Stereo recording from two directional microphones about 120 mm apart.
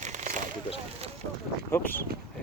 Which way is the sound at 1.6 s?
20° left (ahead or behind).